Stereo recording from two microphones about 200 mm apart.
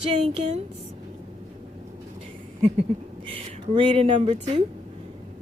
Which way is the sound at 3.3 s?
25° right (ahead or behind).